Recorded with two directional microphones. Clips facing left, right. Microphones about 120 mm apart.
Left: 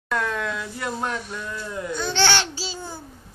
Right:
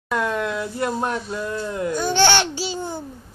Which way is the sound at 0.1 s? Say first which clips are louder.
Right 3 dB; 15° right (ahead or behind).